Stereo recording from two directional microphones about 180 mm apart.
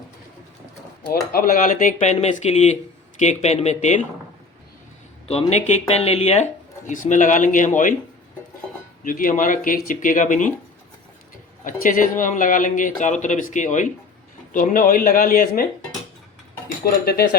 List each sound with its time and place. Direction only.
1.1 s speech: 55° left (ahead or behind)
5.3 s speech: 35° left (ahead or behind)
9.0 s speech: 50° left (ahead or behind)
11.6 s speech: 50° left (ahead or behind)